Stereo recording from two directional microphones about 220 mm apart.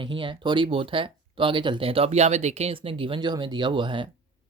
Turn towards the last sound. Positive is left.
turn(degrees=-20)  # may be behind; listen again after turning